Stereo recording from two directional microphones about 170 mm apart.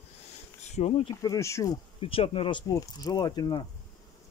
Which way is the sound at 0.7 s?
40° left (ahead or behind).